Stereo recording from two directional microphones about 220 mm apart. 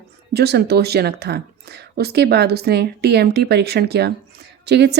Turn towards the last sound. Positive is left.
turn(degrees=-50)  # may be behind; listen again after turning